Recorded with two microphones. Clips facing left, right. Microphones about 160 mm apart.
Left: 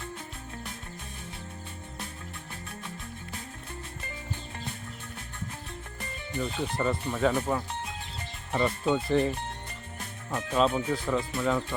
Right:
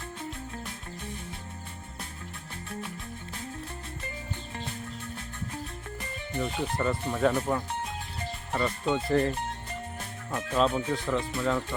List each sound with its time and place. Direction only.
6.4 s speech: centre (ahead or behind)
8.5 s speech: 20° left (ahead or behind)
9.0 s speech: centre (ahead or behind)
10.3 s speech: 10° left (ahead or behind)